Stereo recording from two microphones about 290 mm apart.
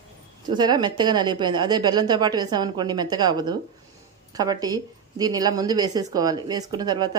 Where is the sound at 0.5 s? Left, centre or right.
Centre.